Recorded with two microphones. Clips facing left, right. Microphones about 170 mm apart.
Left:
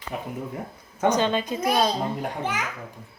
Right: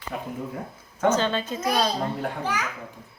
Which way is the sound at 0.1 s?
15° left (ahead or behind).